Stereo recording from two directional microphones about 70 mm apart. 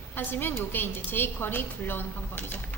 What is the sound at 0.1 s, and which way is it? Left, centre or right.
A woman's voice, left.